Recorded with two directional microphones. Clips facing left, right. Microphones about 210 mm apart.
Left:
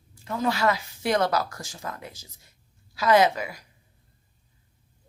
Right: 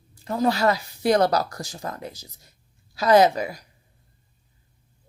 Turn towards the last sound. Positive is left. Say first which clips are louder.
# right 3 dB
turn(degrees=-40)  # may be behind; listen again after turning